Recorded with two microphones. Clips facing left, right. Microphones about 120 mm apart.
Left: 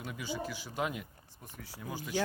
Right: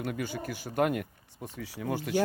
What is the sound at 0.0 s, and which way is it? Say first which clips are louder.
Speech: right 4 dB; 55° right (ahead or behind).